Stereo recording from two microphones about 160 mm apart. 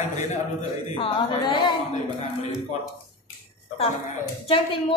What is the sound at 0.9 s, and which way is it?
Speech, 35° left (ahead or behind).